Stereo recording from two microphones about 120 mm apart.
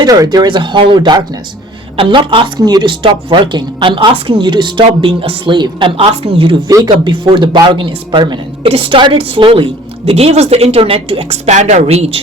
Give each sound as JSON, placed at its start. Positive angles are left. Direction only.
{"t": 0.0, "sound": "a woman's voice", "side_deg": -35}
{"t": 6.7, "sound": "speech", "side_deg": -30}
{"t": 7.0, "sound": "a woman's voice", "side_deg": -40}